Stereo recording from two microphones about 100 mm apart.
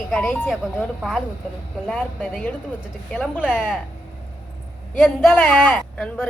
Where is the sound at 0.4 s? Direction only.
5° right (ahead or behind).